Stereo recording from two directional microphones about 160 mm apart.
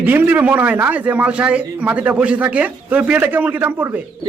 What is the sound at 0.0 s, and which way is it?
A man's voice, 10° right (ahead or behind).